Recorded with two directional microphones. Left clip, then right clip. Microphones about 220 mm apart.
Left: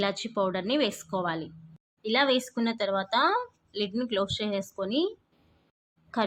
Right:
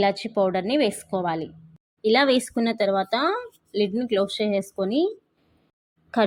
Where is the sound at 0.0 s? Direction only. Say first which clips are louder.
Right 6 dB; 15° right (ahead or behind).